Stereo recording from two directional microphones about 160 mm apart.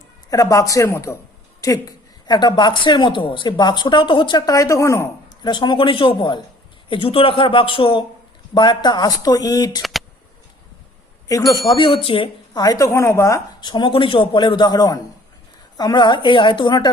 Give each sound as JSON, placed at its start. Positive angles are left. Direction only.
{"t": 0.3, "sound": "a woman's voice", "side_deg": 20}
{"t": 11.3, "sound": "a woman's voice", "side_deg": 20}